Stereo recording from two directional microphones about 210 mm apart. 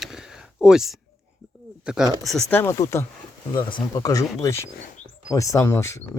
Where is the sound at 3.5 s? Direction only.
20° left (ahead or behind).